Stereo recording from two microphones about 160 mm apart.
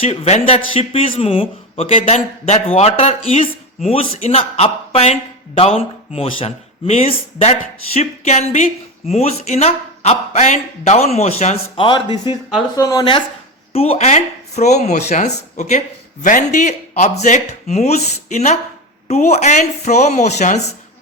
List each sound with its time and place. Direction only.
0.0 s speech: 40° left (ahead or behind)
13.7 s speech: 40° left (ahead or behind)